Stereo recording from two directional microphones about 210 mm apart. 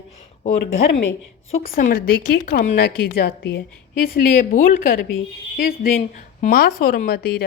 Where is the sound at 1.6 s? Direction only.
40° left (ahead or behind).